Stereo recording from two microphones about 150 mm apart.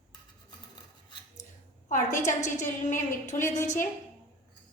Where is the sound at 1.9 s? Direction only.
55° left (ahead or behind).